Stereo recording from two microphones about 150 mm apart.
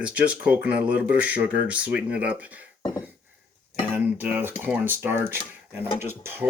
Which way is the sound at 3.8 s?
10° right (ahead or behind).